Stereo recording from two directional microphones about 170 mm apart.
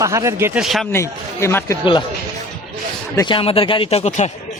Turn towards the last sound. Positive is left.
turn(degrees=40)  # may be behind; listen again after turning